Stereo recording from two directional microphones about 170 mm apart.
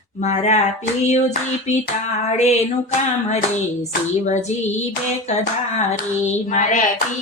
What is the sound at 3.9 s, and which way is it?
Music, 45° left (ahead or behind).